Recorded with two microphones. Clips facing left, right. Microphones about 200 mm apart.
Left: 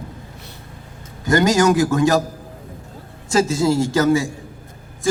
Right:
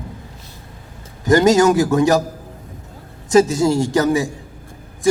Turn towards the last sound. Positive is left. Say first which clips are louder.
# even
turn(degrees=-20)  # may be behind; listen again after turning